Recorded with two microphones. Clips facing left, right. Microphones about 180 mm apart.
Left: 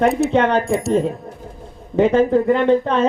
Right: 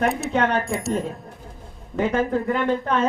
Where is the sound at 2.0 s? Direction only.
30° left (ahead or behind).